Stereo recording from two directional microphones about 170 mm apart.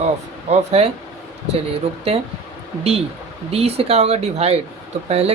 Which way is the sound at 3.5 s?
35° right (ahead or behind).